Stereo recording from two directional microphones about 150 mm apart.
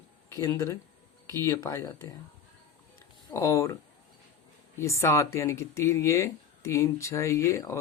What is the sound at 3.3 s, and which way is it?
Speech, 20° left (ahead or behind).